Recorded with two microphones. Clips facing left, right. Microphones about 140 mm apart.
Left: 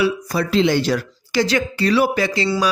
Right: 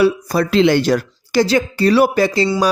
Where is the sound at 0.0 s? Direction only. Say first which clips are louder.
Right 5 dB; 45° right (ahead or behind).